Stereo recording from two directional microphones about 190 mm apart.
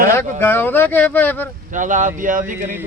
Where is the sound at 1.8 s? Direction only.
40° right (ahead or behind).